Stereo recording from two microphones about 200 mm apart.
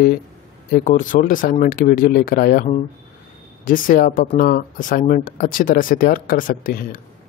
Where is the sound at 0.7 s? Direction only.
40° left (ahead or behind).